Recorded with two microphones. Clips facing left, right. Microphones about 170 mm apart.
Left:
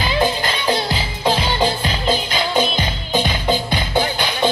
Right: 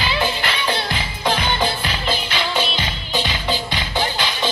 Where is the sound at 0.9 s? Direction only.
30° left (ahead or behind).